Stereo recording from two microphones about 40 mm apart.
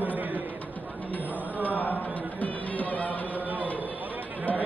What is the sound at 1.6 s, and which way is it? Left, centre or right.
Music, left.